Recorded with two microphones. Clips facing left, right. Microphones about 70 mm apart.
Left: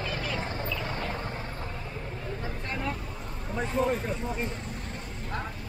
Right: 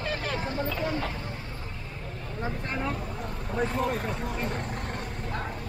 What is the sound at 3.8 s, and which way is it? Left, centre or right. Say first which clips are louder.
Speech: left 1 dB; right.